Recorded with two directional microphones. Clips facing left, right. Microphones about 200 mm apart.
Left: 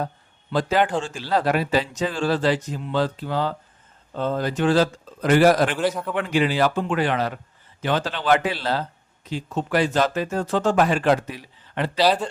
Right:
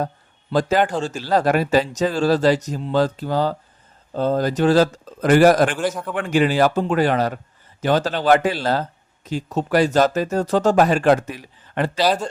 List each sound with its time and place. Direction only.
0.5 s speech: 45° right (ahead or behind)
5.7 s a man's voice: centre (ahead or behind)
6.1 s speech: 45° right (ahead or behind)